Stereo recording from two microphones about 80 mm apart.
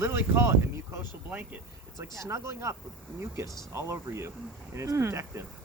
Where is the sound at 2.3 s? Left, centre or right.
Right.